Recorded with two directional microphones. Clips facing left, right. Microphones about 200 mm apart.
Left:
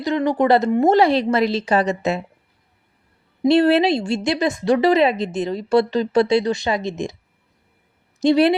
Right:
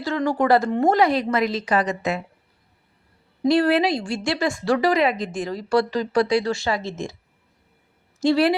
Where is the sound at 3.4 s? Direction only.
25° left (ahead or behind).